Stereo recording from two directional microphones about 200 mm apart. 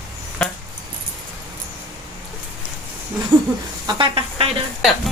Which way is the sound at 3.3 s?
10° right (ahead or behind).